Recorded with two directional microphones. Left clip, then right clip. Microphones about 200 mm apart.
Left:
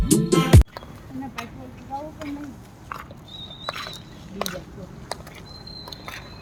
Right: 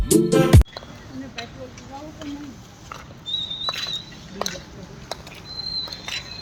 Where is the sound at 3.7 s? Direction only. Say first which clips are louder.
Right 1 dB; 15° right (ahead or behind).